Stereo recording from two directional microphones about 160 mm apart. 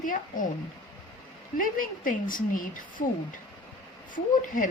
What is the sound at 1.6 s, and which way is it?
Speech, 60° left (ahead or behind).